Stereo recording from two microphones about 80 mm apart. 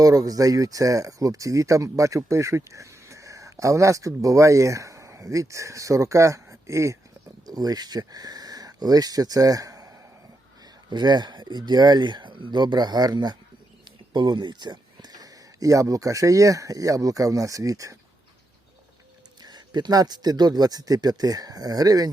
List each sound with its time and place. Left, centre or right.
0.0 s speech: right
7.4 s speech: right
10.8 s speech: right
14.1 s speech: right
19.4 s speech: right